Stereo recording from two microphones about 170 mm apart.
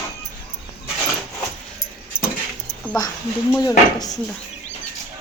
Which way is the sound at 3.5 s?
20° left (ahead or behind).